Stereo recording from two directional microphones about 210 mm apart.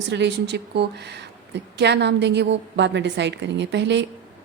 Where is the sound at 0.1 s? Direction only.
55° right (ahead or behind).